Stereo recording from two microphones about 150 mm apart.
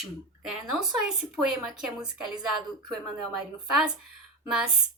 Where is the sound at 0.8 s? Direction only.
5° right (ahead or behind).